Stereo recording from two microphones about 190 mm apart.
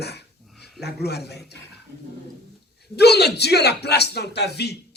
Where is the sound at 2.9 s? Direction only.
60° left (ahead or behind).